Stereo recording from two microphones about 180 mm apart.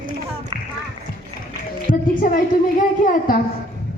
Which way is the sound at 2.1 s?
50° left (ahead or behind).